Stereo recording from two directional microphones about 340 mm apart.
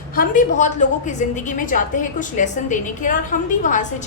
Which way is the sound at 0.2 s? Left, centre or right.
Left.